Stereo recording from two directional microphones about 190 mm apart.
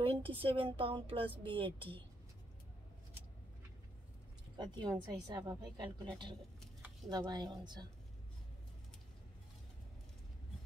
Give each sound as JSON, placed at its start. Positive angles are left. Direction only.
{"t": 0.0, "sound": "a woman's voice", "side_deg": -30}
{"t": 4.6, "sound": "a woman's voice", "side_deg": -25}
{"t": 7.1, "sound": "a woman's voice", "side_deg": -20}